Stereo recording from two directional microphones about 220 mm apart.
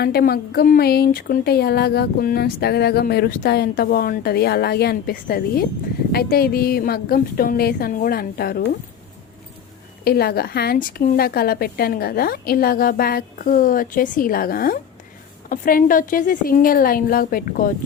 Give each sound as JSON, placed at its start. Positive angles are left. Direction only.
{"t": 0.0, "sound": "speech", "side_deg": 45}
{"t": 10.0, "sound": "a woman's voice", "side_deg": 45}